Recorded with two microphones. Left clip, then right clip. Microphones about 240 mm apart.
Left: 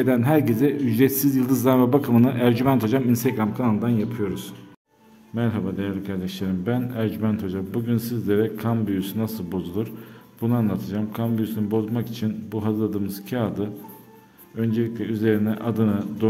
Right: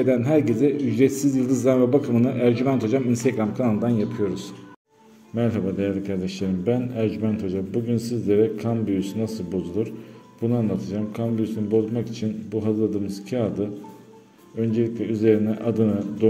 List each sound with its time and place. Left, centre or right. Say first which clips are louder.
0.0 s a man's voice: even; left